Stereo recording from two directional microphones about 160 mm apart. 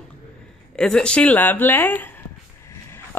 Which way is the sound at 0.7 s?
5° left (ahead or behind).